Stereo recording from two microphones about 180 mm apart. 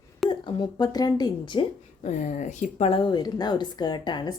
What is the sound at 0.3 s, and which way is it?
Speech, 25° left (ahead or behind).